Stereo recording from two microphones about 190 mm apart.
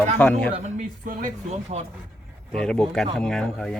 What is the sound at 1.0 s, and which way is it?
Speech, 45° right (ahead or behind).